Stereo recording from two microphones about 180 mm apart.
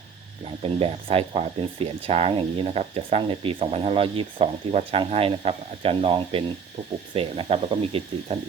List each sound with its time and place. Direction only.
0.6 s speech: 30° right (ahead or behind)